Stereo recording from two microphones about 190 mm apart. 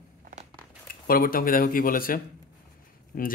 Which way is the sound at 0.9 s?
50° left (ahead or behind).